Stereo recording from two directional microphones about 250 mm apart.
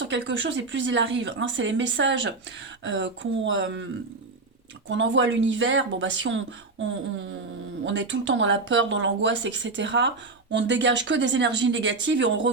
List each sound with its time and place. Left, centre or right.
0.0 s speech: right
4.9 s speech: right
7.9 s speech: right